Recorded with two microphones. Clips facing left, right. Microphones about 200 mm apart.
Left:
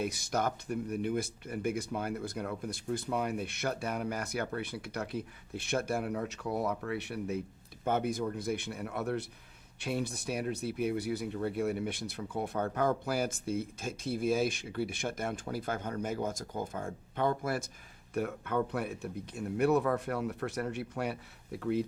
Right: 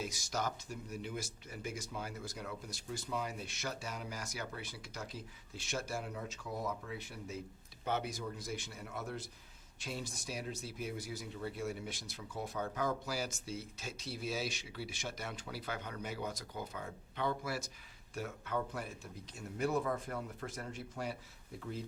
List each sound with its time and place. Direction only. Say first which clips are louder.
0.0 s speech: left 7 dB; 60° left (ahead or behind)
7.9 s speech: left 7 dB; 50° left (ahead or behind); by 21.8 s 70° left (ahead or behind)